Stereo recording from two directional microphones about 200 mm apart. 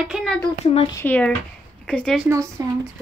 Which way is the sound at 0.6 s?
30° left (ahead or behind).